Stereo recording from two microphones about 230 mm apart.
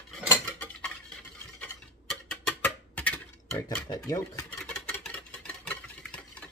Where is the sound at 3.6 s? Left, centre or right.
Centre.